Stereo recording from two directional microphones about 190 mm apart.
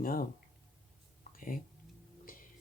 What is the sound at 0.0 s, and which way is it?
Speech, 50° left (ahead or behind).